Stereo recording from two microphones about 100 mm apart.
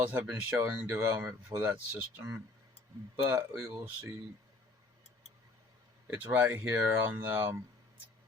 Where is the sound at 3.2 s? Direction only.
25° right (ahead or behind).